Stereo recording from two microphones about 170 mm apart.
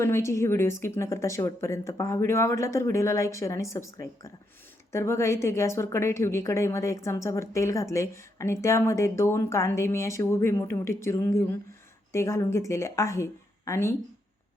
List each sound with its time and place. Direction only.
0.0 s a woman's voice: 15° left (ahead or behind)